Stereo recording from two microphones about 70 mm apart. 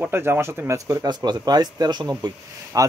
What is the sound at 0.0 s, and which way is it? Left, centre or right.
Speech, right.